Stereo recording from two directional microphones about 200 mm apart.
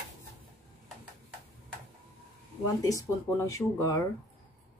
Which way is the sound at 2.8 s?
15° left (ahead or behind).